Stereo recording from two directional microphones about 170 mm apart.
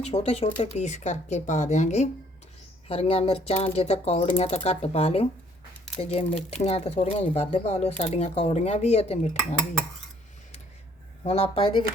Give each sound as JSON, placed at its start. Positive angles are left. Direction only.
{"t": 0.0, "sound": "speech", "side_deg": 40}
{"t": 11.2, "sound": "speech", "side_deg": 35}